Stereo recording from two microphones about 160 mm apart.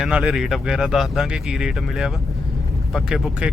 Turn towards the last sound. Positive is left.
turn(degrees=-5)  # may be behind; listen again after turning